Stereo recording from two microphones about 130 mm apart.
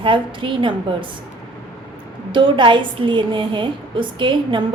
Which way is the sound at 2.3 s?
40° right (ahead or behind).